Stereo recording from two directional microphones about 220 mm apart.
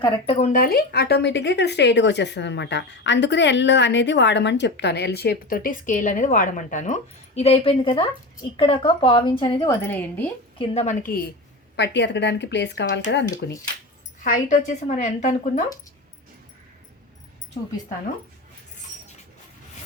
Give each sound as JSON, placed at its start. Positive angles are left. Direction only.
{"t": 0.0, "sound": "a woman's voice", "side_deg": 25}
{"t": 9.8, "sound": "a woman's voice", "side_deg": 10}
{"t": 10.6, "sound": "a woman's voice", "side_deg": 30}
{"t": 11.8, "sound": "a woman's voice", "side_deg": 50}
{"t": 14.3, "sound": "a woman's voice", "side_deg": 35}